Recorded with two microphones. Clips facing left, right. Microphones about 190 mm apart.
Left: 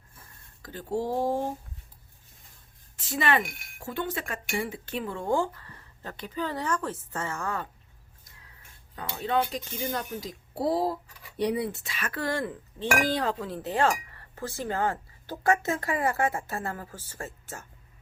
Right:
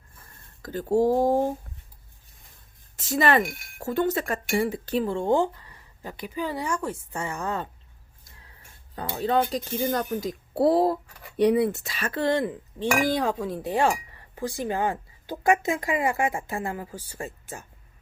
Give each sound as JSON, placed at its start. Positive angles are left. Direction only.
{"t": 0.6, "sound": "speech", "side_deg": -45}
{"t": 2.9, "sound": "speech", "side_deg": -40}
{"t": 9.0, "sound": "speech", "side_deg": -35}